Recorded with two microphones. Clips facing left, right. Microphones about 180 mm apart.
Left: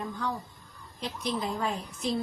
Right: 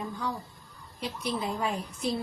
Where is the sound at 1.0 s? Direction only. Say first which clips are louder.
Even; 10° right (ahead or behind).